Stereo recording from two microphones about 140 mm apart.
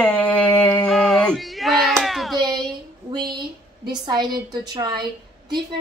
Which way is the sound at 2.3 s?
30° right (ahead or behind).